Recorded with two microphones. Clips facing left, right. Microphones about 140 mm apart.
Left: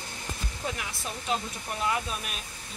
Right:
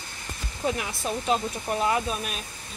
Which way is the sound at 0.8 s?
30° right (ahead or behind).